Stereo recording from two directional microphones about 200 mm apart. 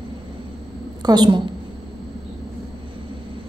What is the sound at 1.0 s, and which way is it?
Speech, 20° right (ahead or behind).